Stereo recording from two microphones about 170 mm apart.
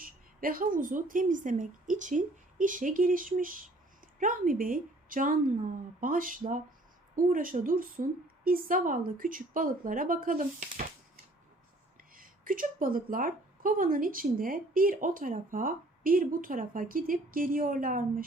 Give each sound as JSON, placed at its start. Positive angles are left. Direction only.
{"t": 0.0, "sound": "a woman's voice", "side_deg": -55}
{"t": 11.9, "sound": "a woman's voice", "side_deg": -55}